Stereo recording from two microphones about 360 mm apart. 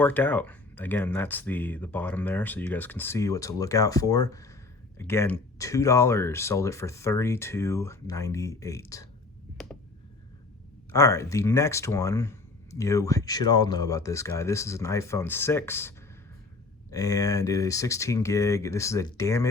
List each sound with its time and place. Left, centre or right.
0.0 s speech: centre
10.9 s speech: centre